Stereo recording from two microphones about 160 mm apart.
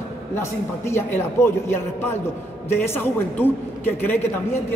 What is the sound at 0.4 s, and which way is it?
A woman's voice, 15° left (ahead or behind).